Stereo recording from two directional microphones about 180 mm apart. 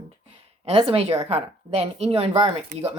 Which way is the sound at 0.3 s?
30° right (ahead or behind).